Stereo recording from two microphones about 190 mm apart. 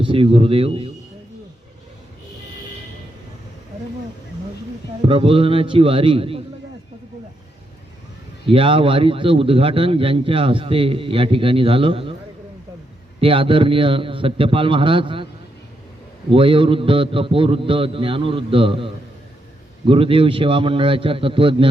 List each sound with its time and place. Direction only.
0.0 s a man's voice: 30° right (ahead or behind)
5.0 s a man's voice: 30° right (ahead or behind)
8.4 s a man's voice: 25° right (ahead or behind)
13.2 s a man's voice: 25° right (ahead or behind)
16.3 s a man's voice: 25° right (ahead or behind)
19.9 s a man's voice: 30° right (ahead or behind)